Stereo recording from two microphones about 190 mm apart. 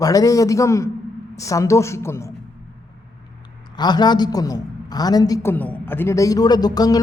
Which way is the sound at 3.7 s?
20° left (ahead or behind).